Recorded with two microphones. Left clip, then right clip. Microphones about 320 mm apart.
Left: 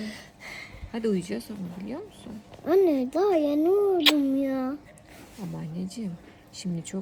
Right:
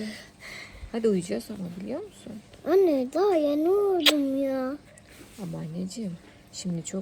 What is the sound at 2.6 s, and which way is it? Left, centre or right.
A child's voice, centre.